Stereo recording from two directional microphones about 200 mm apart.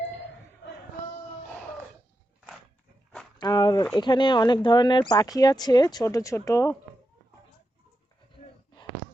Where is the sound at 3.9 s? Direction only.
20° left (ahead or behind).